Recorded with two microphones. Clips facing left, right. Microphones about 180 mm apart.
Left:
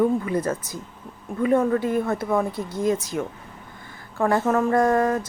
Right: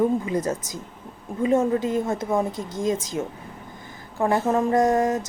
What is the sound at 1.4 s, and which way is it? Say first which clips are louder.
A woman's voice: left 1 dB; 25° right (ahead or behind).